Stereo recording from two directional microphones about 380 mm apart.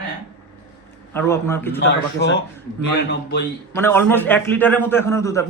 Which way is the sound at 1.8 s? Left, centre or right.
Left.